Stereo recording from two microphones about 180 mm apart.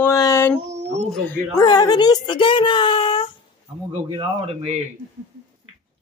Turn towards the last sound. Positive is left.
turn(degrees=-35)  # may be behind; listen again after turning